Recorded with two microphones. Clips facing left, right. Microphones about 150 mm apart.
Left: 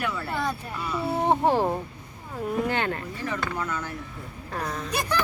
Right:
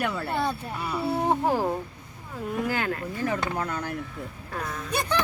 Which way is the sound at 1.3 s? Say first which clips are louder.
Left 4 dB; 20° left (ahead or behind).